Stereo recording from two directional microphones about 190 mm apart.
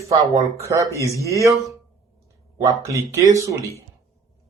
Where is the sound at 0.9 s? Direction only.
15° left (ahead or behind).